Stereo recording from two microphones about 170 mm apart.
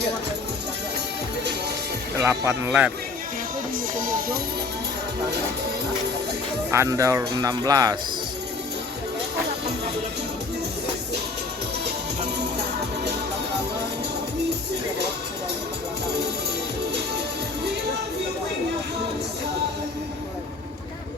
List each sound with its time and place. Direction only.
2.2 s speech: 10° right (ahead or behind)
3.9 s speech: 55° right (ahead or behind)
6.7 s speech: 15° right (ahead or behind)